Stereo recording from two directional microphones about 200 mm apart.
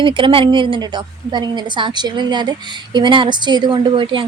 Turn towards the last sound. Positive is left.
turn(degrees=-25)  # may be behind; listen again after turning